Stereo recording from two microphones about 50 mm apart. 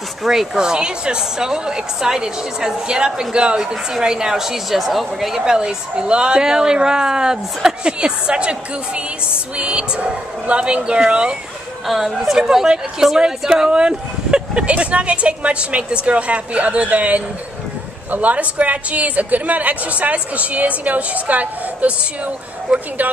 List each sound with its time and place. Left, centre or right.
0.2 s a woman's voice: centre
5.4 s a woman's voice: centre
11.9 s a woman's voice: centre; by 22.3 s right